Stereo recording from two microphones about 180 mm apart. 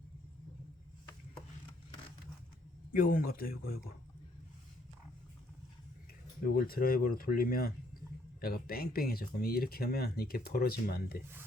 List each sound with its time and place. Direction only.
2.9 s speech: 50° left (ahead or behind)
6.4 s speech: 55° left (ahead or behind)